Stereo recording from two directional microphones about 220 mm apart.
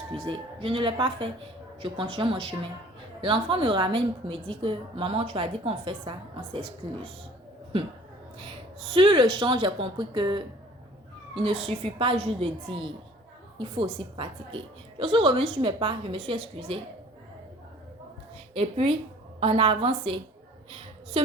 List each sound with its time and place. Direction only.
0.3 s a woman's voice: 25° right (ahead or behind)
8.9 s a woman's voice: 20° right (ahead or behind)
18.5 s a woman's voice: 25° right (ahead or behind)
20.7 s a sound: 25° right (ahead or behind)